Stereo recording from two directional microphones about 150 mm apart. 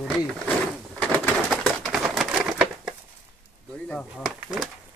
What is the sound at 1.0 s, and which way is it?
Bird, 10° left (ahead or behind).